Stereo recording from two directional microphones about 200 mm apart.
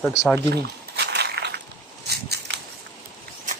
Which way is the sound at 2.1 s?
55° right (ahead or behind).